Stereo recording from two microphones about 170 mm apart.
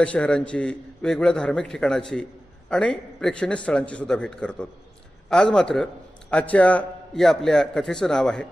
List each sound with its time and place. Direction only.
0.0 s a man's voice: 5° left (ahead or behind)